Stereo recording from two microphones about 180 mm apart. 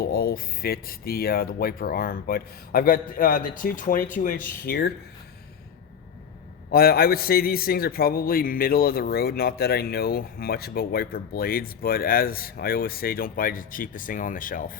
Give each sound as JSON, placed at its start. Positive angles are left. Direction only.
{"t": 0.0, "sound": "speech", "side_deg": 55}
{"t": 4.6, "sound": "a man's voice", "side_deg": 60}
{"t": 6.7, "sound": "a man's voice", "side_deg": 55}